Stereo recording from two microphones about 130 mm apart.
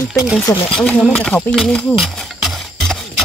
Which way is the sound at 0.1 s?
5° right (ahead or behind).